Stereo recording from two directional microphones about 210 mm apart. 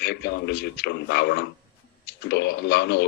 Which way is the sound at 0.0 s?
50° left (ahead or behind).